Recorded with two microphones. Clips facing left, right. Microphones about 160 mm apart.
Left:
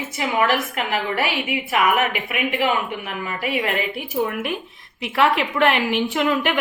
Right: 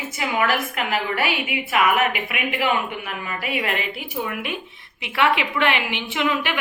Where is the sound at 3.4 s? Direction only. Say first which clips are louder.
Left 3 dB; 40° left (ahead or behind).